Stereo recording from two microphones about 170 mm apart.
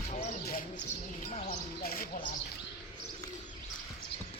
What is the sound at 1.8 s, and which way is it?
Speech, 55° left (ahead or behind).